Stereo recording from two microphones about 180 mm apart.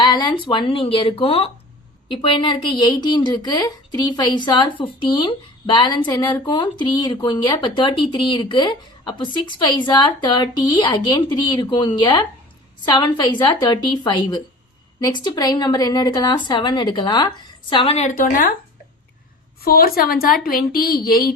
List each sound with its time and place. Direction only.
0.0 s a woman's voice: 25° left (ahead or behind)
18.1 s speech: 50° left (ahead or behind)
19.6 s a woman's voice: 55° left (ahead or behind)